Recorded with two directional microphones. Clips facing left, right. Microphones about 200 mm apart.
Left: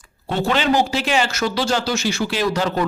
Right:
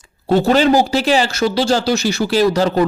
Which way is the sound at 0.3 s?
40° right (ahead or behind).